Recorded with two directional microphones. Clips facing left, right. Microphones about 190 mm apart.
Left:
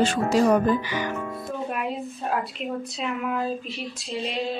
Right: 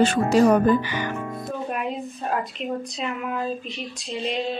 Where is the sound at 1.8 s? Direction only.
Centre (ahead or behind).